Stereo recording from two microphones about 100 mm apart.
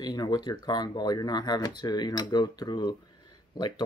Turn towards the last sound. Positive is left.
turn(degrees=45)  # may be behind; listen again after turning